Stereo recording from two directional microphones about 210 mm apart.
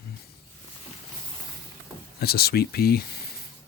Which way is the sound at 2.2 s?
45° left (ahead or behind).